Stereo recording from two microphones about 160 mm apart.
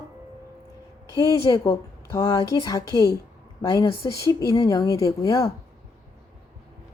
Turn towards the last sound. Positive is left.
turn(degrees=20)  # may be behind; listen again after turning